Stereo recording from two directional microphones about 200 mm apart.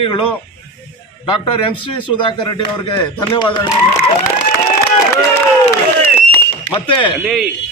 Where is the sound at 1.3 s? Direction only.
25° left (ahead or behind).